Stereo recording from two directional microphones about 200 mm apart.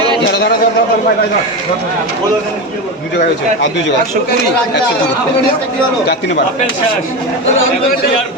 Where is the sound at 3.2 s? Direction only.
65° left (ahead or behind).